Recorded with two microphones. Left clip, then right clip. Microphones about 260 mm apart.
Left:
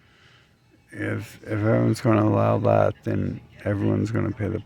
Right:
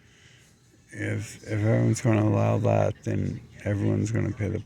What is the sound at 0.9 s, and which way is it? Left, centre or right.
Speech, centre.